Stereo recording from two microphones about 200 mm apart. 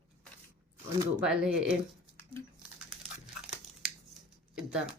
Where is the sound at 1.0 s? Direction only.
5° right (ahead or behind).